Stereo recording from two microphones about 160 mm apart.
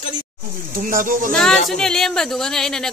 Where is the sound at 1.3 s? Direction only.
5° left (ahead or behind).